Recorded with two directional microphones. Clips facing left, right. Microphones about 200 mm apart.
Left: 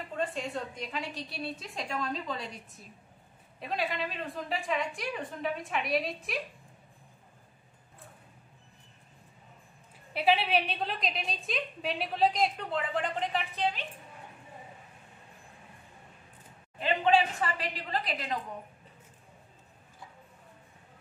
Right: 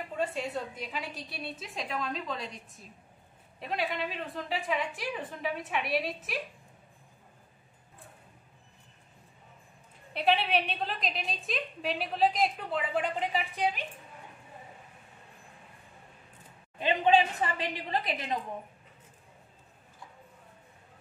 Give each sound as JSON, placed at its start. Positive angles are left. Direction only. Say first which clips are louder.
{"t": 0.1, "sound": "a woman's voice", "louder": "right 1 dB", "side_deg": -10}
{"t": 10.1, "sound": "a woman's voice", "louder": "left 1 dB", "side_deg": 0}
{"t": 17.0, "sound": "a woman's voice", "louder": "right 1 dB", "side_deg": -20}